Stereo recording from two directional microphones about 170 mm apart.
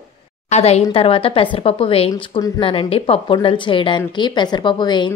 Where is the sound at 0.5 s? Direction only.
40° left (ahead or behind).